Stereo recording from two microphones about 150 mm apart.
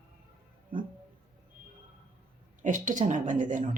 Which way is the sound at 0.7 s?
65° right (ahead or behind).